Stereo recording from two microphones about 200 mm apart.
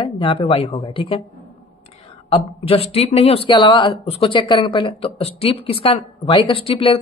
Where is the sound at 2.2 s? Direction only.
30° left (ahead or behind).